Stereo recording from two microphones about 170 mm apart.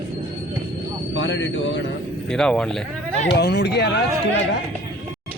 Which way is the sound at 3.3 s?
75° left (ahead or behind).